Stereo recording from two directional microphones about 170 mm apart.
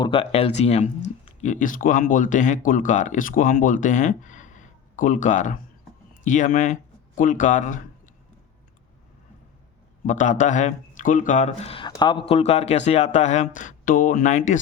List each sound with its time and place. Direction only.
0.0 s a man's voice: 30° left (ahead or behind); by 8.1 s 50° left (ahead or behind)
10.1 s speech: 45° left (ahead or behind)
11.9 s speech: 25° left (ahead or behind); by 14.6 s 45° left (ahead or behind)